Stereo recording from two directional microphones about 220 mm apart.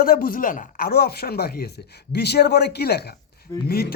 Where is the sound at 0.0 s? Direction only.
40° left (ahead or behind).